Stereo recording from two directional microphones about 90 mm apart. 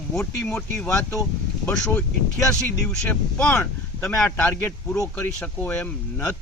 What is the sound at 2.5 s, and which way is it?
Speech, 10° left (ahead or behind).